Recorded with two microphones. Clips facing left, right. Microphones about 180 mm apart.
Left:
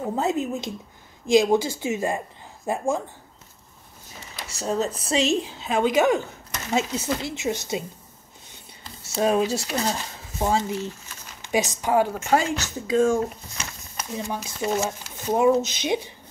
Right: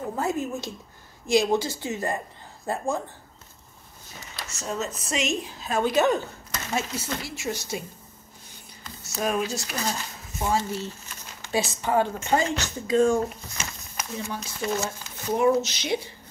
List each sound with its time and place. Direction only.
0.1 s speech: 20° left (ahead or behind)
4.2 s speech: 30° left (ahead or behind)
8.8 s speech: 30° left (ahead or behind); by 13.1 s 5° left (ahead or behind)
14.1 s speech: 15° left (ahead or behind)